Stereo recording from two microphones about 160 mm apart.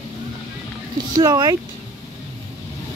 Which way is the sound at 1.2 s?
25° right (ahead or behind).